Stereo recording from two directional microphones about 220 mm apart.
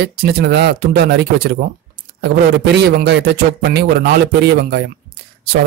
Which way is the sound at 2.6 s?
50° right (ahead or behind).